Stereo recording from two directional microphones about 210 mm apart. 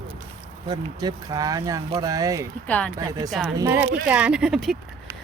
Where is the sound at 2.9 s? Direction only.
15° right (ahead or behind).